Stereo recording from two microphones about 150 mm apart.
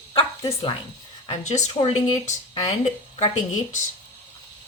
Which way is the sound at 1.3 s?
50° left (ahead or behind).